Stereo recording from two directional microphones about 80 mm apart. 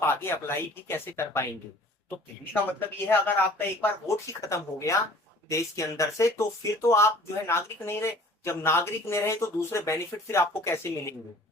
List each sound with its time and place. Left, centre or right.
0.0 s speech: left
4.0 s speech: left